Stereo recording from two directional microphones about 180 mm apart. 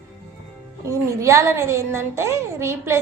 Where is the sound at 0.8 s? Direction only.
15° right (ahead or behind).